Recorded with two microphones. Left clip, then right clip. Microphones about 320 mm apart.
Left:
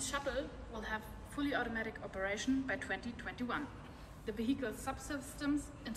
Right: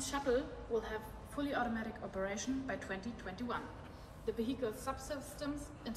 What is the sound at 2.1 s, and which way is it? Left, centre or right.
A woman's voice, centre.